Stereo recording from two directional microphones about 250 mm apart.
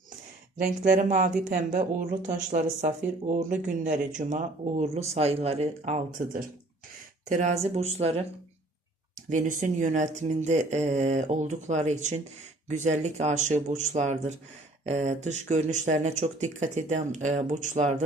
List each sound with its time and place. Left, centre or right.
0.5 s speech: right
9.3 s speech: right